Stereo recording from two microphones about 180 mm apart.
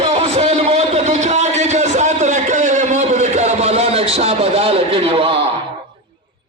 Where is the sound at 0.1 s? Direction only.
35° right (ahead or behind).